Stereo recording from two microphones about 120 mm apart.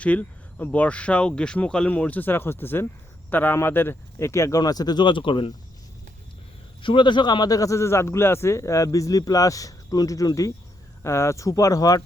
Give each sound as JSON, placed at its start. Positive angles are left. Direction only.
{"t": 0.0, "sound": "a man's voice", "side_deg": 10}
{"t": 6.8, "sound": "a man's voice", "side_deg": 40}